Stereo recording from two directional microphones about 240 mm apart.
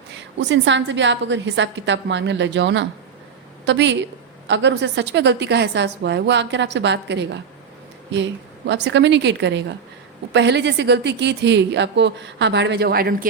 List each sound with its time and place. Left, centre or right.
0.1 s a woman's voice: right